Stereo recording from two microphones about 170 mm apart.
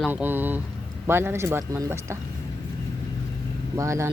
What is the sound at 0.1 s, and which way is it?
Speech, 10° right (ahead or behind).